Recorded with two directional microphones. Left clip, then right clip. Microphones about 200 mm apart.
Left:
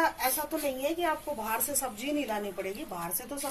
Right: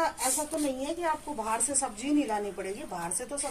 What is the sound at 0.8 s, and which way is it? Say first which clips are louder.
A woman's voice: left 1 dB; 30° left (ahead or behind).